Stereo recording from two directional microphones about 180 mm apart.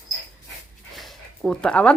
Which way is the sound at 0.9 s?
Centre (ahead or behind).